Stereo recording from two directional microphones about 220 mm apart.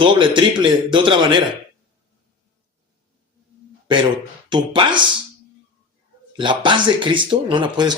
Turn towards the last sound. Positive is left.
turn(degrees=-20)  # may be behind; listen again after turning